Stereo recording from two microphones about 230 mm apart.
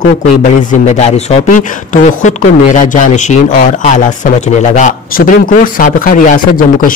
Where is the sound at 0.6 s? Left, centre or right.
Left.